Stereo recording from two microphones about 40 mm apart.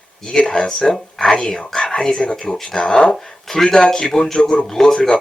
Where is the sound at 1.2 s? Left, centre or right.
Centre.